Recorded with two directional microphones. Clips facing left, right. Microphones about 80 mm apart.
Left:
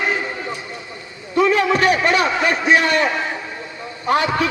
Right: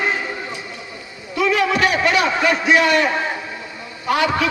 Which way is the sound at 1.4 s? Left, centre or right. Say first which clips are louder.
Left 2 dB; left.